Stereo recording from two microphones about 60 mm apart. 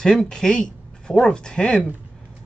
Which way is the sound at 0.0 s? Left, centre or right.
Centre.